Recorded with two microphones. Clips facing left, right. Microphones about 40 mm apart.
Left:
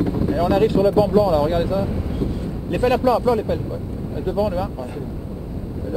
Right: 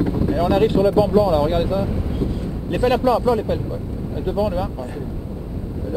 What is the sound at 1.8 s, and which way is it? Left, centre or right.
Vehicle, centre.